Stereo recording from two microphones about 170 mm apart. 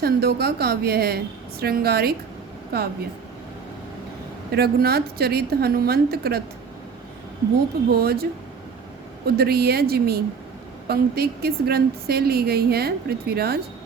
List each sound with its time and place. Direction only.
0.0 s a woman's voice: 65° right (ahead or behind)
4.5 s a woman's voice: 65° right (ahead or behind)
7.9 s a woman's voice: 65° right (ahead or behind)